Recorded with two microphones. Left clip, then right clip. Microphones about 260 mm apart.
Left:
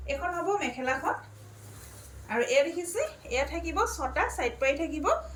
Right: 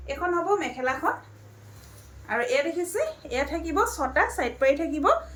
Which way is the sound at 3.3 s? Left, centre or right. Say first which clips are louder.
Right 3 dB; centre.